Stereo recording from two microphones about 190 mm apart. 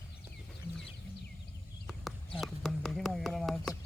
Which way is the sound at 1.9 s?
Centre (ahead or behind).